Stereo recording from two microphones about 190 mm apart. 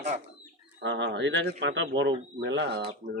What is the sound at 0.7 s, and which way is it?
Speech, 70° right (ahead or behind).